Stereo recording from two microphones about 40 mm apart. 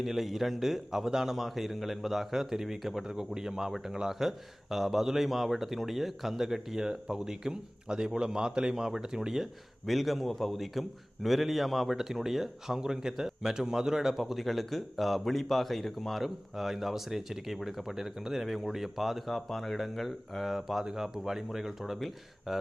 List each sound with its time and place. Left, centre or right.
0.0 s speech: centre
3.1 s speech: centre